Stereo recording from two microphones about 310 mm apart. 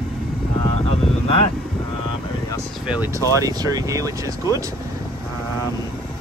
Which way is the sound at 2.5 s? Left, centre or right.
Centre.